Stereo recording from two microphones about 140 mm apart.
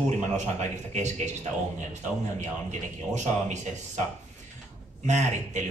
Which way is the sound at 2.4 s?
55° right (ahead or behind).